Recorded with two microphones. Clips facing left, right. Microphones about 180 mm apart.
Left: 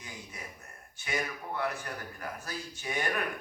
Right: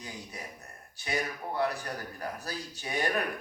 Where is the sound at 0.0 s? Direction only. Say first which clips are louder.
Right 3 dB; 35° right (ahead or behind).